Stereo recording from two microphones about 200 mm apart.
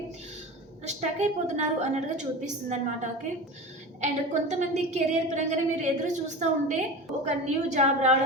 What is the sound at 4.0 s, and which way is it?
A woman's voice, 35° right (ahead or behind).